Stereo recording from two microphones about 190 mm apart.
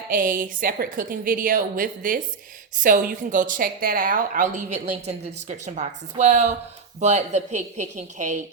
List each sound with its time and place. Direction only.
0.1 s a woman's voice: 45° right (ahead or behind)